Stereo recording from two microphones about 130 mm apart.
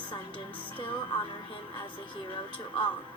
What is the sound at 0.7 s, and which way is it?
Speech, 40° left (ahead or behind).